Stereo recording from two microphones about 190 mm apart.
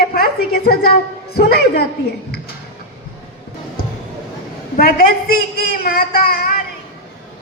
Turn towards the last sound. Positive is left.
turn(degrees=50)  # may be behind; listen again after turning